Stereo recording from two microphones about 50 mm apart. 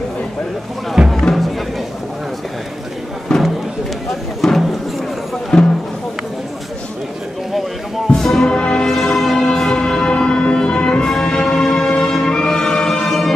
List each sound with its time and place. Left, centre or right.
1.0 s music: centre
3.3 s a sound: centre
5.5 s music: centre
8.1 s music: centre